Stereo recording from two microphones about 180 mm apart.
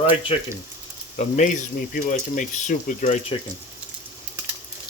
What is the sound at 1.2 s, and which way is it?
Speech, 40° left (ahead or behind).